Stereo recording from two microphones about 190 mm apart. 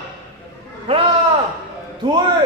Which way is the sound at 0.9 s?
30° right (ahead or behind).